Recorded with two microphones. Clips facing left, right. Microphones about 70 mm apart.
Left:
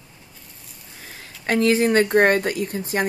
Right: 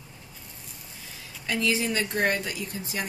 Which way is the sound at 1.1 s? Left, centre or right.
Left.